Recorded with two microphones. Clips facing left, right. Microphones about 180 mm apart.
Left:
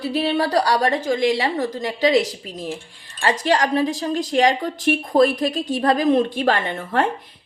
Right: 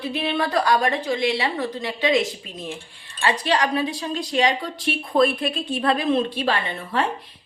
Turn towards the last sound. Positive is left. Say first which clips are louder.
# left 3 dB
turn(degrees=45)  # may be behind; listen again after turning